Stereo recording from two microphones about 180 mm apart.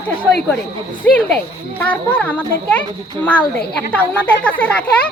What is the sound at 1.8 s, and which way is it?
Speech, 5° left (ahead or behind).